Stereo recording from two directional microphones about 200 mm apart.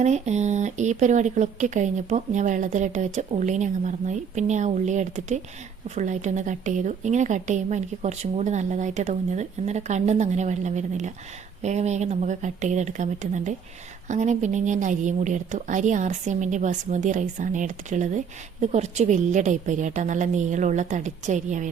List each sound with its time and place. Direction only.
0.0 s speech: 35° right (ahead or behind)